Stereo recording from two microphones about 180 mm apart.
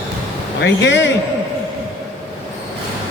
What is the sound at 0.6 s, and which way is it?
Speech, 80° left.